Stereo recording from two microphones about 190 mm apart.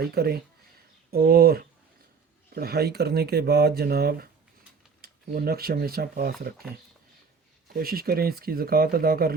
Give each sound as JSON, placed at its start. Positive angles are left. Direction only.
{"t": 0.0, "sound": "speech", "side_deg": -55}
{"t": 7.7, "sound": "speech", "side_deg": -50}